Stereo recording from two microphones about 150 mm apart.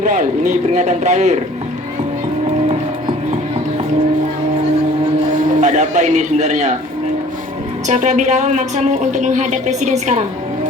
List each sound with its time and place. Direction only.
0.0 s speech: 55° right (ahead or behind)
5.5 s a man's voice: 50° right (ahead or behind)
7.9 s speech: 55° right (ahead or behind)